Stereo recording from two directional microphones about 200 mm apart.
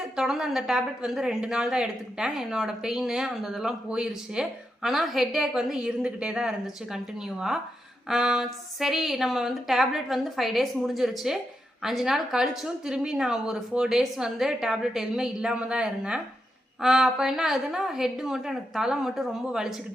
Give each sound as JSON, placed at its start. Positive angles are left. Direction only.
{"t": 0.2, "sound": "a woman's voice", "side_deg": 0}